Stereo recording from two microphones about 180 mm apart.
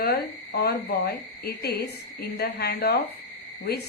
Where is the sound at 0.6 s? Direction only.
60° left (ahead or behind).